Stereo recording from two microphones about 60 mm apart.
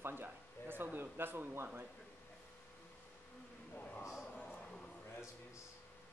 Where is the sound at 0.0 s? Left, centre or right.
Right.